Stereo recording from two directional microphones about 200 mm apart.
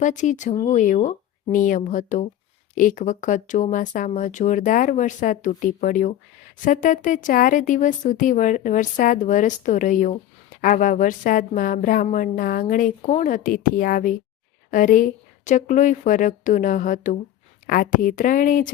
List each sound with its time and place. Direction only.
0.0 s a woman's voice: 40° left (ahead or behind)